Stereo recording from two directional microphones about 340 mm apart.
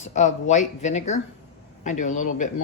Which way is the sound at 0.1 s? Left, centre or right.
Left.